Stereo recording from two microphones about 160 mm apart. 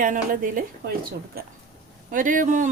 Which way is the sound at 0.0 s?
60° right (ahead or behind).